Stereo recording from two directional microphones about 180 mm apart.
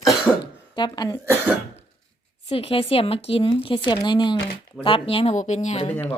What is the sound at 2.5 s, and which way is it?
Speech, 30° left (ahead or behind).